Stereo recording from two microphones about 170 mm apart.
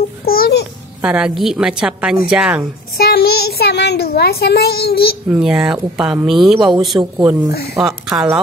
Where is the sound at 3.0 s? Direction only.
65° left (ahead or behind).